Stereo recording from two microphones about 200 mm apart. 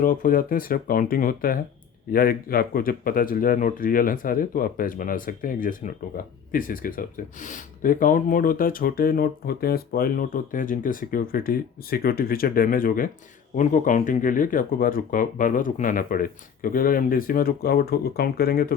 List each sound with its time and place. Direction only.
0.0 s speech: 45° left (ahead or behind)